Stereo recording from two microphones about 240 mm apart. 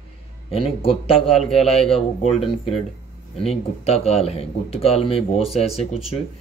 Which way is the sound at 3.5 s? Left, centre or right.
Left.